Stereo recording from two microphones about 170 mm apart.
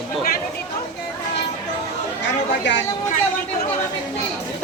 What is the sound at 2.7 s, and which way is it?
Speech, 90° left.